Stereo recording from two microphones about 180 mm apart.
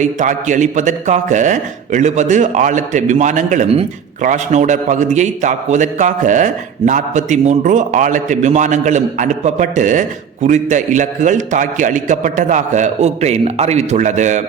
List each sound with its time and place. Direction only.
0.0 s a man's voice: 40° right (ahead or behind)